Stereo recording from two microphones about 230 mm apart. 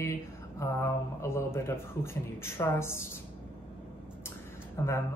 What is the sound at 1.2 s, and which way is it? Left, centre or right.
Speech, centre.